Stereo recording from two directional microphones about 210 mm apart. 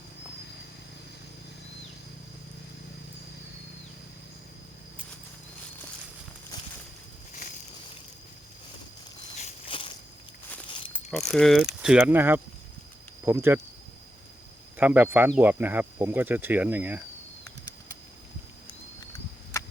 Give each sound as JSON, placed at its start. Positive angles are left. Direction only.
{"t": 9.4, "sound": "walk", "side_deg": 25}
{"t": 10.9, "sound": "pulleys", "side_deg": 0}
{"t": 11.8, "sound": "cricket", "side_deg": -5}
{"t": 14.8, "sound": "cricket", "side_deg": -10}